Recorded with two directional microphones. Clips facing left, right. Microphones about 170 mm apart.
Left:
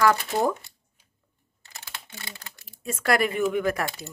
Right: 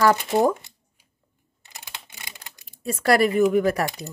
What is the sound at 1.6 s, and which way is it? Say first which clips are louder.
Typing: right 1 dB; 15° right (ahead or behind).